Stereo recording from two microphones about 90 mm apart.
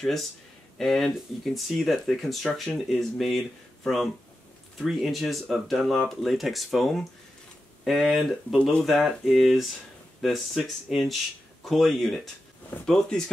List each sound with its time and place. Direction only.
0.7 s speech: 5° left (ahead or behind)